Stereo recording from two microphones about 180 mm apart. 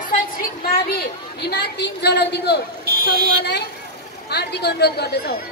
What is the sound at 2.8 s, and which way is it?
Vehicle, 60° right (ahead or behind).